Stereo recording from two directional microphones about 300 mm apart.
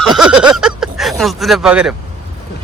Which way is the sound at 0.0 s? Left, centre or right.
Centre.